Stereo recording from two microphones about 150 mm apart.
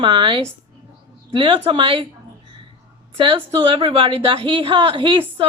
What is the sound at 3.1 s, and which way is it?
A woman's voice, 35° right (ahead or behind).